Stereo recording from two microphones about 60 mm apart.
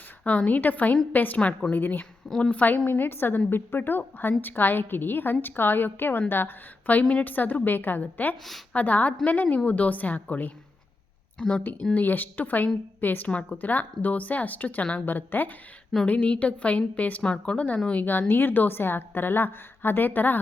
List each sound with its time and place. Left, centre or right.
0.3 s a woman's voice: left
11.6 s a woman's voice: left
16.0 s a woman's voice: left